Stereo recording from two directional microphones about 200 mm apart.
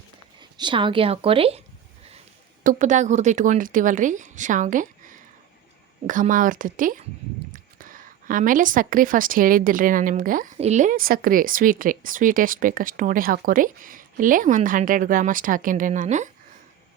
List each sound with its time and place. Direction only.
0.3 s speech: 25° right (ahead or behind)
2.6 s a woman's voice: 40° right (ahead or behind)